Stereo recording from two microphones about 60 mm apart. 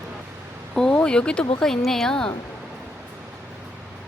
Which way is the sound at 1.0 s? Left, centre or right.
Centre.